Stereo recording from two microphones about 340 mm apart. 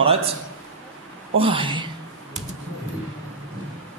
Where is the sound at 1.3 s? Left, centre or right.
Centre.